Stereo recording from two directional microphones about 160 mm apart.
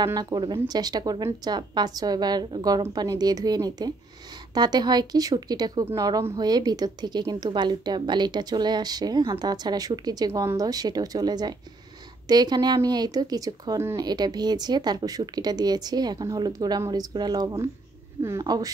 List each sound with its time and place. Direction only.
0.0 s speech: 25° right (ahead or behind)